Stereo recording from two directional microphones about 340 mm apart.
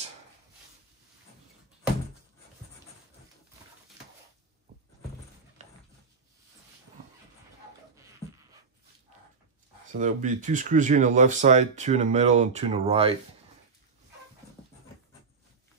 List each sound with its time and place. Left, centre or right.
9.9 s speech: right